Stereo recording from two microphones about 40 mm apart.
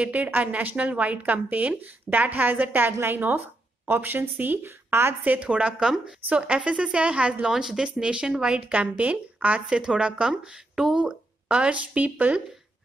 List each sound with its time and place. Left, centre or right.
0.0 s a woman's voice: right
5.4 s speech: right
7.4 s speech: centre
8.7 s speech: right
9.7 s speech: right